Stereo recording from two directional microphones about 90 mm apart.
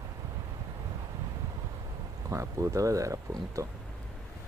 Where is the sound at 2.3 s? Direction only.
35° right (ahead or behind).